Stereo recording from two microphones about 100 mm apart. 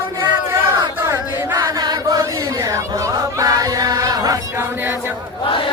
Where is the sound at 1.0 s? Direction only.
20° right (ahead or behind).